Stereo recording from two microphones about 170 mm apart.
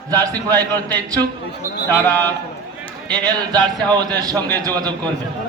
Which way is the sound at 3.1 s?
25° right (ahead or behind).